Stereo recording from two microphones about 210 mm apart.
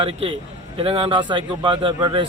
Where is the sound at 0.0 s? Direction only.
25° right (ahead or behind).